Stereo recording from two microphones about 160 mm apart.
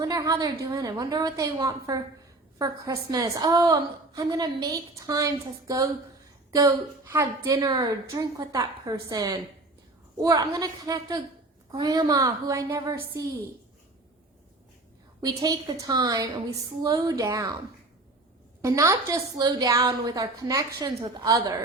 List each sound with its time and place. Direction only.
0.0 s a woman's voice: 20° right (ahead or behind)
15.2 s a woman's voice: 25° right (ahead or behind)
18.6 s a woman's voice: 20° right (ahead or behind)